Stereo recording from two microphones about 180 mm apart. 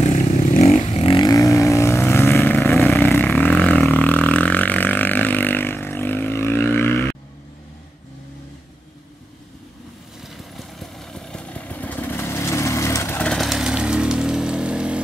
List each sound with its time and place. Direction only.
0.0 s vehicle: 45° left (ahead or behind)
0.9 s vehicle: 30° left (ahead or behind); by 2.9 s 10° left (ahead or behind)
2.9 s didgeridoo: 10° left (ahead or behind)
10.2 s vehicle: centre (ahead or behind)